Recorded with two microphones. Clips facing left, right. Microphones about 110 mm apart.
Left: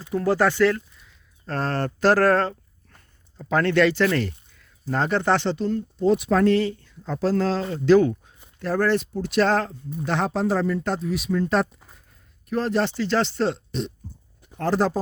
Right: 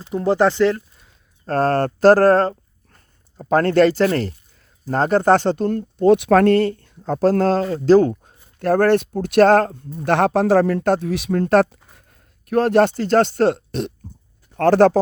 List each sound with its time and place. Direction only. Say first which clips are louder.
0.0 s speech: right 4 dB; 20° right (ahead or behind)
0.9 s speech: even; 45° right (ahead or behind)
7.7 s speech: right 1 dB; 35° right (ahead or behind)
8.5 s speech: right 7 dB; 60° right (ahead or behind)
14.5 s speech: right 9 dB; 70° right (ahead or behind)